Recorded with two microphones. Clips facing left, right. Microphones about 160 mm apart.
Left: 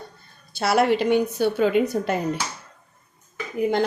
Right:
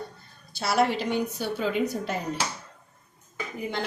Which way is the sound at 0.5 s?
60° left (ahead or behind).